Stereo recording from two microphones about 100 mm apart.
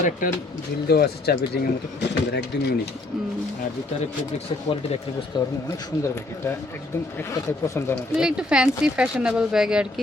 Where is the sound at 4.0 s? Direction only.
90° left.